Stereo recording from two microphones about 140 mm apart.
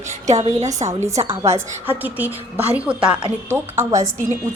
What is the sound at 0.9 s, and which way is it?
A woman's voice, 20° right (ahead or behind).